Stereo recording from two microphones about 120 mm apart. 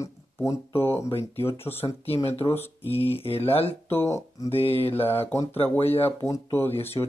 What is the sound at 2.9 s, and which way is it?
Mantra, 55° left (ahead or behind).